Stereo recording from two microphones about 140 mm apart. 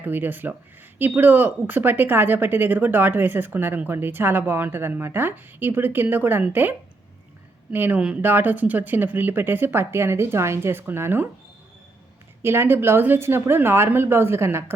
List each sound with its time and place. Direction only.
0.0 s speech: 15° right (ahead or behind)
12.4 s speech: 15° right (ahead or behind)